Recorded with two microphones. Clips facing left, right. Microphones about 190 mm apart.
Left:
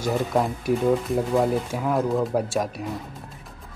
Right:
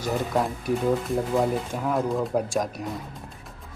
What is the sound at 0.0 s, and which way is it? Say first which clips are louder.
Speech: left 2 dB; 10° left (ahead or behind).